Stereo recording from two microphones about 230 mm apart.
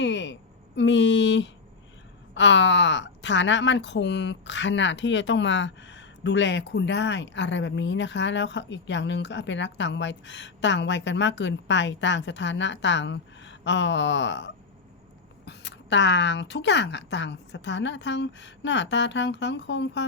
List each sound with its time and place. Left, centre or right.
0.0 s a woman's voice: left